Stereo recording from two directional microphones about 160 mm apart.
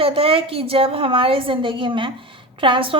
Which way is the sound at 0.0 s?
35° right (ahead or behind).